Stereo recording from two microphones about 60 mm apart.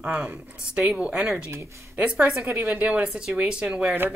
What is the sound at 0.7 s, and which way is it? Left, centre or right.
Speech, centre.